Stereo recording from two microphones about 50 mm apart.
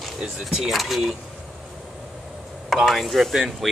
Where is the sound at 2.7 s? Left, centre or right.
Centre.